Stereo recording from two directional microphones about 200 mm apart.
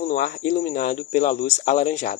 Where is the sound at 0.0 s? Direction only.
40° left (ahead or behind).